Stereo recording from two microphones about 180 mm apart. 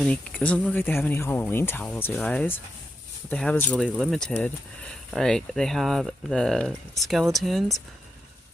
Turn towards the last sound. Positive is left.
turn(degrees=0)  # may be behind; listen again after turning